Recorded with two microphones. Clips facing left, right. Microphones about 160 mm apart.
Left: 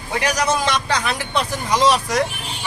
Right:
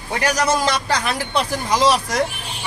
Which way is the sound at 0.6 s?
35° right (ahead or behind).